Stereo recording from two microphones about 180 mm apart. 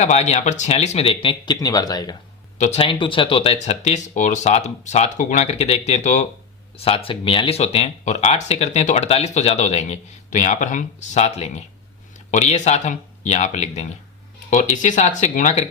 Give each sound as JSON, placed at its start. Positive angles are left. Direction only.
{"t": 0.0, "sound": "speech", "side_deg": 40}
{"t": 2.6, "sound": "speech", "side_deg": 35}